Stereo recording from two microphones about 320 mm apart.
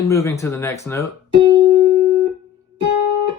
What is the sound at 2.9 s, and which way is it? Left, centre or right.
Guitar, right.